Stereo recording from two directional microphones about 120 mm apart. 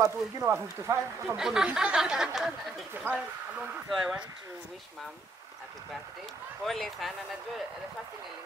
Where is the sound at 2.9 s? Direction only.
15° right (ahead or behind).